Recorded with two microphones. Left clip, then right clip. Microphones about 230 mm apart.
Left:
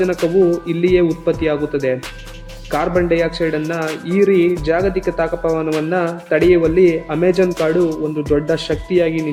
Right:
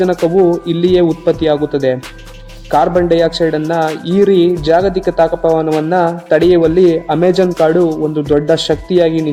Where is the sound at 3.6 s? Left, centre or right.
Centre.